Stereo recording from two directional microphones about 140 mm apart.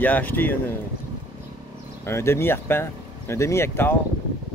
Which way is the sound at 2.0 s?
15° left (ahead or behind).